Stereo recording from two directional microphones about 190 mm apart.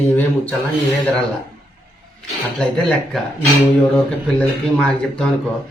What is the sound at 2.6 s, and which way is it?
Speech, 5° left (ahead or behind).